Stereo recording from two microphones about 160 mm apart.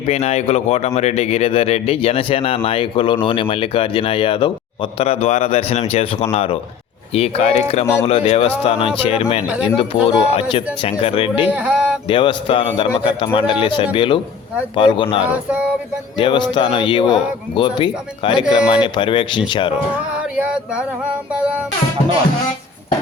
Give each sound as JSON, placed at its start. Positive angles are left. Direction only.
{"t": 0.1, "sound": "speech", "side_deg": 45}
{"t": 9.5, "sound": "speech", "side_deg": -5}
{"t": 9.9, "sound": "speech", "side_deg": 35}
{"t": 11.4, "sound": "a sound", "side_deg": -10}
{"t": 12.0, "sound": "speech", "side_deg": 30}
{"t": 15.2, "sound": "speech", "side_deg": -10}
{"t": 16.1, "sound": "speech", "side_deg": 30}
{"t": 18.3, "sound": "speech", "side_deg": -5}
{"t": 18.9, "sound": "speech", "side_deg": 30}
{"t": 21.3, "sound": "speech", "side_deg": -5}